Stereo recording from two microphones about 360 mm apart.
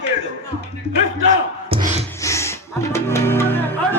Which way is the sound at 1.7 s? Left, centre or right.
Centre.